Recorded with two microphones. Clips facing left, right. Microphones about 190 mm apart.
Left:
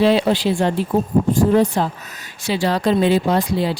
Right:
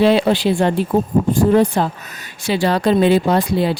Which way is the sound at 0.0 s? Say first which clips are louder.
Right 2 dB; 60° right (ahead or behind).